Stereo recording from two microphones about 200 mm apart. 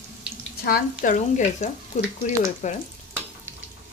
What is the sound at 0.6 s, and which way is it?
Speech, 45° left (ahead or behind).